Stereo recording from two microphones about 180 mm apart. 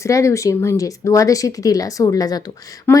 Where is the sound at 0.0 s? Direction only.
15° left (ahead or behind).